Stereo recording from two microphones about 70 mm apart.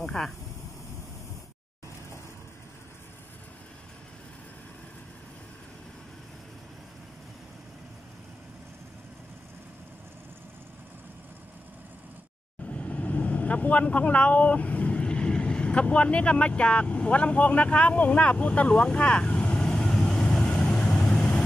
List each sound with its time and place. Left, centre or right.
0.0 s speech: centre
12.6 s vehicle: centre